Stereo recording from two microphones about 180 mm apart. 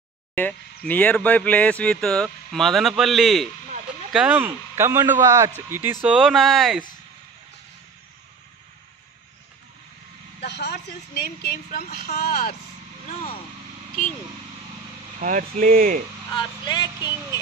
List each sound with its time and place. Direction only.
0.3 s speech: 10° left (ahead or behind)
4.5 s a man's voice: 15° right (ahead or behind); by 6.8 s centre (ahead or behind)
10.4 s speech: 70° left (ahead or behind)
12.2 s speech: 55° left (ahead or behind)
15.1 s speech: 45° right (ahead or behind)
16.3 s speech: 25° left (ahead or behind)